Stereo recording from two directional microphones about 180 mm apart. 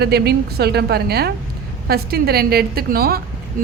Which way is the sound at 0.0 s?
65° right (ahead or behind).